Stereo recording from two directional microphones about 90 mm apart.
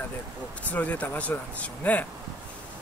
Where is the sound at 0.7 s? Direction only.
20° left (ahead or behind).